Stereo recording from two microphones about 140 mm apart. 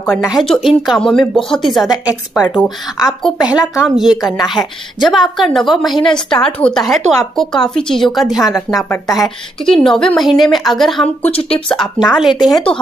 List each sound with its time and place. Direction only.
0.0 s a woman's voice: 5° right (ahead or behind)
3.5 s a woman's voice: 20° left (ahead or behind)
3.9 s a woman's voice: 5° right (ahead or behind)